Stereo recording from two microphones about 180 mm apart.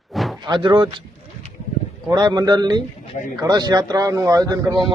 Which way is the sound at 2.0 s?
20° right (ahead or behind).